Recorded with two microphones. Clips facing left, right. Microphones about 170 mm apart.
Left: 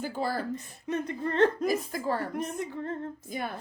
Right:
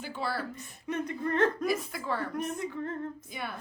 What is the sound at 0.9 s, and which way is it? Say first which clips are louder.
Speech: left 1 dB; 30° left (ahead or behind).